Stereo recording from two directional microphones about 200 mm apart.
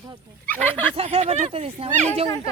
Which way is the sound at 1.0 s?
30° right (ahead or behind).